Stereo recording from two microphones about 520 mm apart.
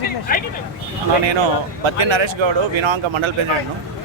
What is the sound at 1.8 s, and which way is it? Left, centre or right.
Speech, right.